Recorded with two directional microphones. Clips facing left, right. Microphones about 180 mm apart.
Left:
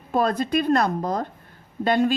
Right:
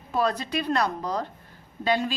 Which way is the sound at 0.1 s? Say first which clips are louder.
Left 4 dB; 50° left (ahead or behind).